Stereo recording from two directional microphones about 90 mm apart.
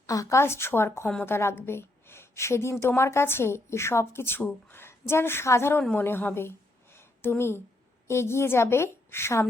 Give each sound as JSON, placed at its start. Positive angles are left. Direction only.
{"t": 0.1, "sound": "a woman's voice", "side_deg": 35}
{"t": 6.9, "sound": "a sound", "side_deg": 25}
{"t": 8.0, "sound": "a woman's voice", "side_deg": 30}